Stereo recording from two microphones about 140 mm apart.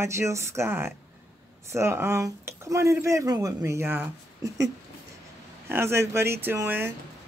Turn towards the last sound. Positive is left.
turn(degrees=-15)  # may be behind; listen again after turning